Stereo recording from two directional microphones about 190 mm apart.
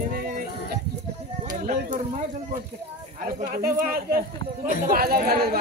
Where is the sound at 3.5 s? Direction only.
50° right (ahead or behind).